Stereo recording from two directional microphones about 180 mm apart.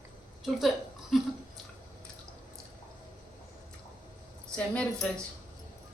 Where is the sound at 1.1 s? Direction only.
Centre (ahead or behind).